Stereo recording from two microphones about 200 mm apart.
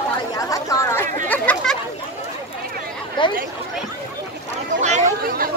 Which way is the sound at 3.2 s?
25° left (ahead or behind).